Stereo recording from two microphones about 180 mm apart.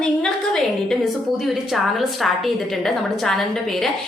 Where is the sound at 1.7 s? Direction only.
Centre (ahead or behind).